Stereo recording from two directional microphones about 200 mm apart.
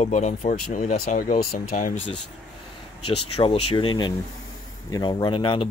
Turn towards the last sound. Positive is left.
turn(degrees=25)  # may be behind; listen again after turning